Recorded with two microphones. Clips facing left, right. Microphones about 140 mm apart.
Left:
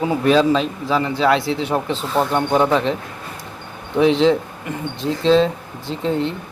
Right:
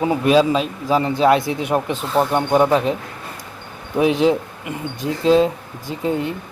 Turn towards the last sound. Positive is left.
turn(degrees=-10)  # may be behind; listen again after turning